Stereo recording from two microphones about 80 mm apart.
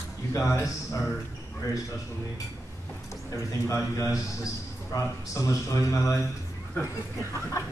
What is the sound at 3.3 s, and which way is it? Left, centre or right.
A man's voice, left.